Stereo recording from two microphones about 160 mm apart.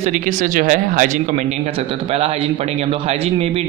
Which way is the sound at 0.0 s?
55° right (ahead or behind).